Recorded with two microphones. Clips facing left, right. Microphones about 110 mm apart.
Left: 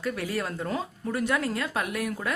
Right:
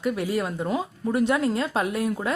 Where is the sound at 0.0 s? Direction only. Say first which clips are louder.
Right 5 dB; 20° right (ahead or behind).